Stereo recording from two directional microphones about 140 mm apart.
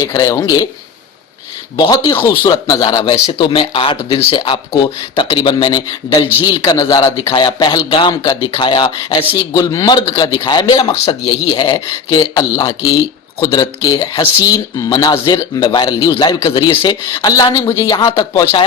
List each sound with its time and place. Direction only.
0.0 s speech: 25° left (ahead or behind)
1.7 s speech: 30° left (ahead or behind)